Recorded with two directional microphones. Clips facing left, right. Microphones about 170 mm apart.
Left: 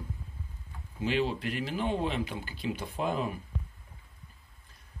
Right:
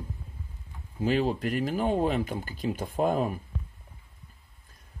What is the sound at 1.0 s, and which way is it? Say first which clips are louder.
Speech: right 4 dB; 45° right (ahead or behind).